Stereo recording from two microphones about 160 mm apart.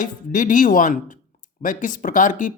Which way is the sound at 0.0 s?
55° left (ahead or behind).